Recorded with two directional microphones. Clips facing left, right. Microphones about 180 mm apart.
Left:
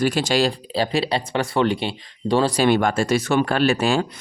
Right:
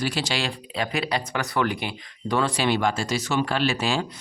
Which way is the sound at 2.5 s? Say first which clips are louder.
Left 5 dB; 50° left (ahead or behind).